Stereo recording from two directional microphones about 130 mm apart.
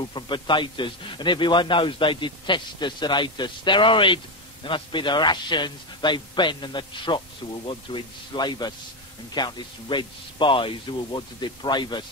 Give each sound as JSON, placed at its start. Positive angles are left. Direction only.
{"t": 0.1, "sound": "a man's voice", "side_deg": 35}